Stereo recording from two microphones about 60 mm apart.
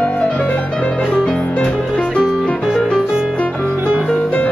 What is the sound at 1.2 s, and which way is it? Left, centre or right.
Music, centre.